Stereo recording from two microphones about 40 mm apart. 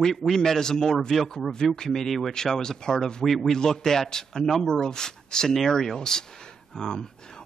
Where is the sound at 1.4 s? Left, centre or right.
Centre.